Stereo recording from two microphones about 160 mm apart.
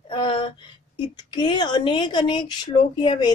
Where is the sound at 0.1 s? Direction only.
30° left (ahead or behind).